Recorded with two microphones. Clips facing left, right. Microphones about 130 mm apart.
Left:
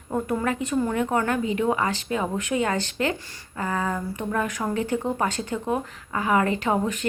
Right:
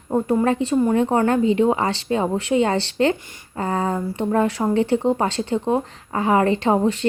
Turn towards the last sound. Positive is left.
turn(degrees=-30)  # may be behind; listen again after turning